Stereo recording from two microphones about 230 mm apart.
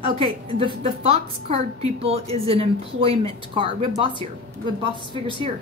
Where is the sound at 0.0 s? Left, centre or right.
Right.